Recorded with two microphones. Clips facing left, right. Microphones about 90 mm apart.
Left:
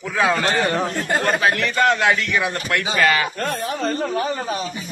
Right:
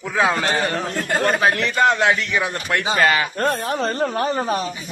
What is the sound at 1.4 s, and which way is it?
A man's voice, 25° right (ahead or behind).